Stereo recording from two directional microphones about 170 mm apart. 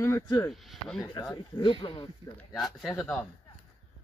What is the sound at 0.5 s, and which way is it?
Speech, centre (ahead or behind).